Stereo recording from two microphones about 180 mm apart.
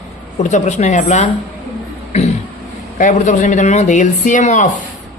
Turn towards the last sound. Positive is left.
turn(degrees=40)  # may be behind; listen again after turning